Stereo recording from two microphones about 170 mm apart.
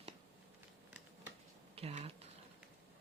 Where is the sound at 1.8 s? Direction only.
35° right (ahead or behind).